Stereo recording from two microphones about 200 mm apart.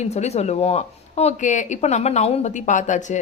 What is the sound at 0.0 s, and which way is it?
Speech, 35° left (ahead or behind).